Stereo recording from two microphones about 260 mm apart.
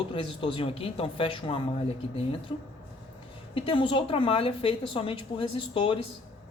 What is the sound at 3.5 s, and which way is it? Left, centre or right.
A woman's voice, centre.